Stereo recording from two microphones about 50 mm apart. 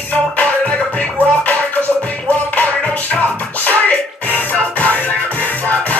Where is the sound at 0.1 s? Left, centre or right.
Left.